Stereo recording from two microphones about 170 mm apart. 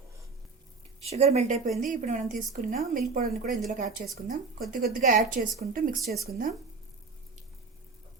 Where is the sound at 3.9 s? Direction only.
Centre (ahead or behind).